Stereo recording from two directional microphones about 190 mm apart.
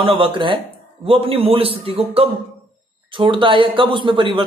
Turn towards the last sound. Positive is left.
turn(degrees=-25)  # may be behind; listen again after turning